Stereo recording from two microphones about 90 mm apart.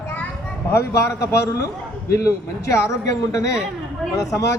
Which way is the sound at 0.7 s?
35° left (ahead or behind).